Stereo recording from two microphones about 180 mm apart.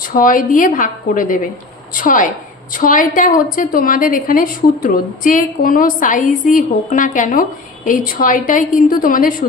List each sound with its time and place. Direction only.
0.0 s a woman's voice: 50° left (ahead or behind)